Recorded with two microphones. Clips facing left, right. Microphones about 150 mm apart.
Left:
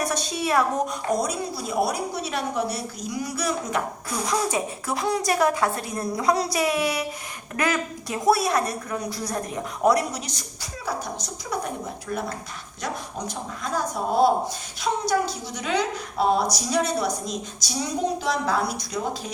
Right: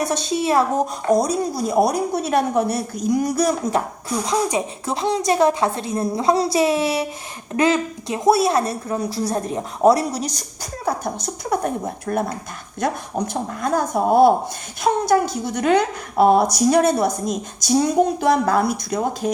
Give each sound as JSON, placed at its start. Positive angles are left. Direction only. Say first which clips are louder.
{"t": 0.0, "sound": "a woman's voice", "louder": "right 5 dB", "side_deg": -25}
{"t": 4.3, "sound": "a woman's voice", "louder": "right 3 dB", "side_deg": -20}
{"t": 10.8, "sound": "a woman's voice", "louder": "right 6 dB", "side_deg": -50}